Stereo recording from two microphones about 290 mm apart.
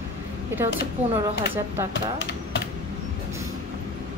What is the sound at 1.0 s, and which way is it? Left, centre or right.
Speech, right.